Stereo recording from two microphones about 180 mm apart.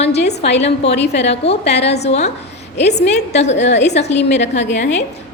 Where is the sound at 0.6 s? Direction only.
35° left (ahead or behind).